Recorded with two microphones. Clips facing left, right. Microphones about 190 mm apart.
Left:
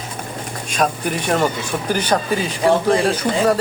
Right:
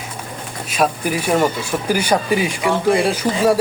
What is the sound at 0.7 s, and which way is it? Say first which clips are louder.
Speech: right 1 dB; 5° right (ahead or behind).